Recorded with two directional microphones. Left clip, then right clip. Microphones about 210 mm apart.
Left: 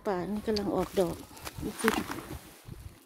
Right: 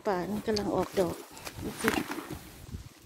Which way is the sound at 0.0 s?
15° left (ahead or behind).